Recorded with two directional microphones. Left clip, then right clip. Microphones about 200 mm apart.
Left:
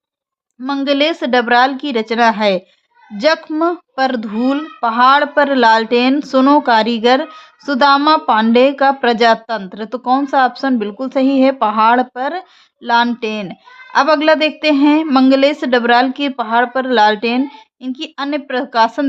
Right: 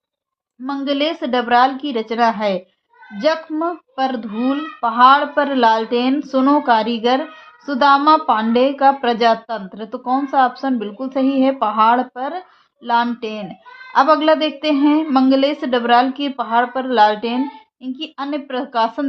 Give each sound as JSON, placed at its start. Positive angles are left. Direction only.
{"t": 0.6, "sound": "a woman's voice", "side_deg": 40}